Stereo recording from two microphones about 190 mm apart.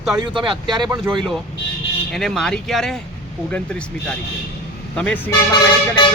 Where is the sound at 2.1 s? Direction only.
Centre (ahead or behind).